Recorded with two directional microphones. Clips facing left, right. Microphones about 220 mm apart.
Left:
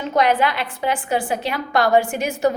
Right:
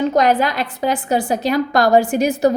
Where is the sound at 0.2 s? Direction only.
40° right (ahead or behind).